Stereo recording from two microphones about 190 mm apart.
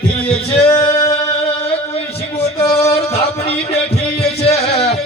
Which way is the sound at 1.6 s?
30° left (ahead or behind).